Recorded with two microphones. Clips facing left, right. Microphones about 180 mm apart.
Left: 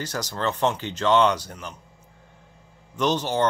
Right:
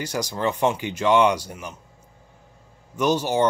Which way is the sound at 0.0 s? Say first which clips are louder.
Right 3 dB; 10° right (ahead or behind).